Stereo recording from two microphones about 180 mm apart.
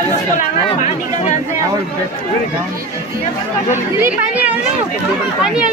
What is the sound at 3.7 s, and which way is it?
Speech, 10° right (ahead or behind).